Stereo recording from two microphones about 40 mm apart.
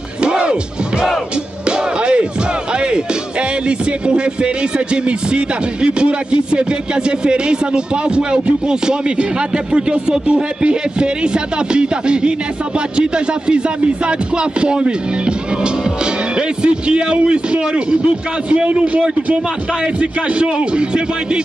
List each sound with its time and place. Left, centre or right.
0.2 s music: right
1.7 s music: right
2.8 s a man's voice: right